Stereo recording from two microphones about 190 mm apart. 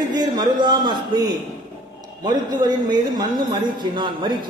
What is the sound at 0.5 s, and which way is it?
Speech, 20° right (ahead or behind).